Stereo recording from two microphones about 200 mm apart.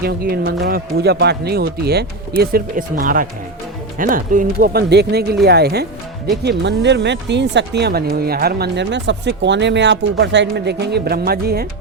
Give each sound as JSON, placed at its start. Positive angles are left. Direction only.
{"t": 0.0, "sound": "speech", "side_deg": -50}